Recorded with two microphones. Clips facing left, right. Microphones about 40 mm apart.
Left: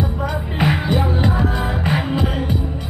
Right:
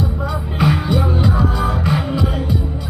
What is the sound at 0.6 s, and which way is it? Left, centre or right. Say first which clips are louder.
Music: right 1 dB; left.